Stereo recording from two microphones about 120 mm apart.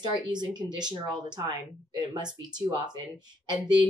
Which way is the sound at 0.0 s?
35° right (ahead or behind).